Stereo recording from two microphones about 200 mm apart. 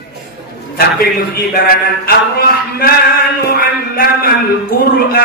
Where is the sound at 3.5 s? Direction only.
50° left (ahead or behind).